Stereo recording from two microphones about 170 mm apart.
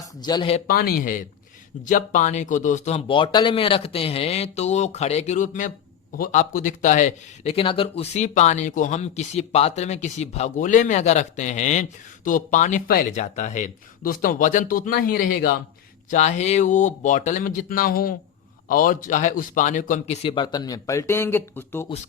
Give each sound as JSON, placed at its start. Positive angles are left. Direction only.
{"t": 0.2, "sound": "speech", "side_deg": 25}
{"t": 0.7, "sound": "speech", "side_deg": 60}
{"t": 13.1, "sound": "speech", "side_deg": 45}
{"t": 16.0, "sound": "speech", "side_deg": 45}
{"t": 20.2, "sound": "speech", "side_deg": 30}